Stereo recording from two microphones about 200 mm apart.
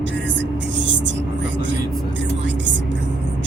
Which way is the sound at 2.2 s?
65° right (ahead or behind).